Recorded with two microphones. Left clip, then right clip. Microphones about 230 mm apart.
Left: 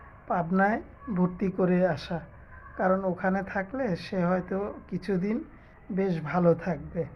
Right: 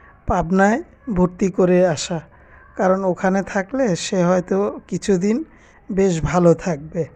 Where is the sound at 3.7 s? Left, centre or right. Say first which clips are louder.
Right 11 dB; right.